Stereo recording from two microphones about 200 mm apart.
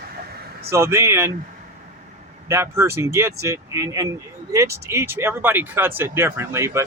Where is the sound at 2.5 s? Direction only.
15° right (ahead or behind).